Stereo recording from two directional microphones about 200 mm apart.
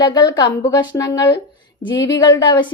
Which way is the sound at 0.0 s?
20° left (ahead or behind).